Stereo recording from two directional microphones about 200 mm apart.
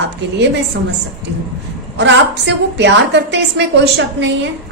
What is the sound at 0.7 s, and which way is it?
Speech, 60° right (ahead or behind).